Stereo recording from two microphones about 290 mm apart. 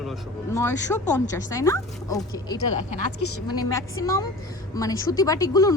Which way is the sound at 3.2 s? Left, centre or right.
Left.